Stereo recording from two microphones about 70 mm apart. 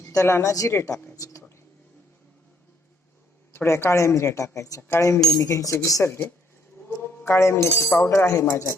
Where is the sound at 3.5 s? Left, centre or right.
Left.